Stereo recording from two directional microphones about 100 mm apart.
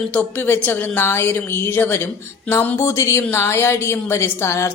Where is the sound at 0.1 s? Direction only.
15° left (ahead or behind).